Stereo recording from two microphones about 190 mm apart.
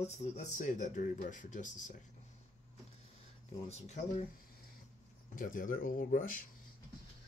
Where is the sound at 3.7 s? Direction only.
35° left (ahead or behind).